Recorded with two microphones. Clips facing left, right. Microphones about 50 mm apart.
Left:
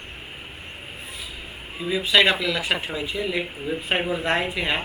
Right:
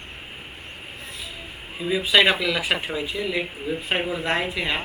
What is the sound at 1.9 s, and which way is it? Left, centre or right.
A man's voice, centre.